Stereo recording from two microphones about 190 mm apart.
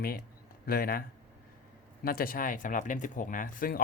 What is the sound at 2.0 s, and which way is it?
Speech, 50° left (ahead or behind).